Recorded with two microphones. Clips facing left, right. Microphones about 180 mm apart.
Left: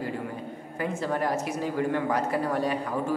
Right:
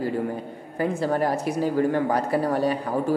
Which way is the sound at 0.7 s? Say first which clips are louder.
Right 5 dB; 35° right (ahead or behind).